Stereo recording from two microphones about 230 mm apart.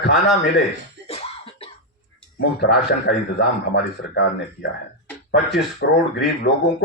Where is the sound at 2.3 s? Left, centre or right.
Left.